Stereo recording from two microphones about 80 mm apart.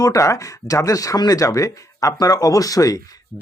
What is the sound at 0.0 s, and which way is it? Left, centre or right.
Speech, left.